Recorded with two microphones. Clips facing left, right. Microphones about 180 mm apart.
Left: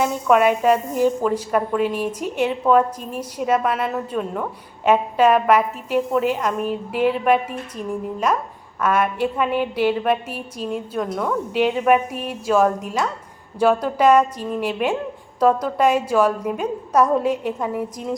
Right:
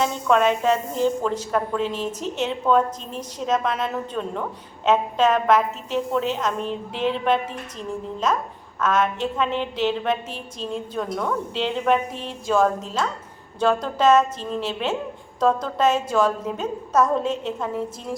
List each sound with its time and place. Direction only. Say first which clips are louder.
0.0 s a woman's voice: left 3 dB; 10° left (ahead or behind)